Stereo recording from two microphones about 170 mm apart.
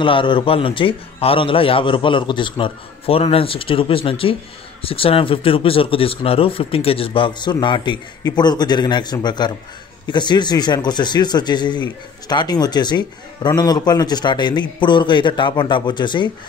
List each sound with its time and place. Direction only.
0.0 s speech: 30° left (ahead or behind)